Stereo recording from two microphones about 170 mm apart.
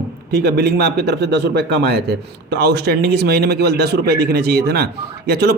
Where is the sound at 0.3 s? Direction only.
70° right (ahead or behind).